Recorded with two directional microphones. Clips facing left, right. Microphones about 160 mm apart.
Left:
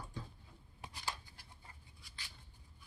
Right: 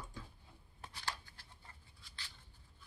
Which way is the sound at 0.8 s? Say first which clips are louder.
Even; 10° left (ahead or behind).